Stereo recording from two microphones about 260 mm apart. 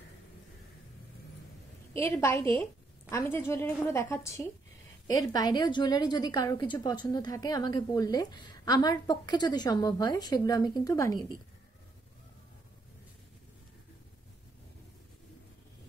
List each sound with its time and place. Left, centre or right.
2.0 s a woman's voice: centre